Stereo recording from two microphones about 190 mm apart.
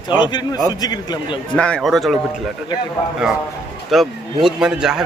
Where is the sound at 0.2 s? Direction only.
25° left (ahead or behind).